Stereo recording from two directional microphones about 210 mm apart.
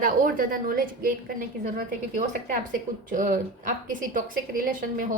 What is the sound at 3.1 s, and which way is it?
A woman's voice, 40° right (ahead or behind).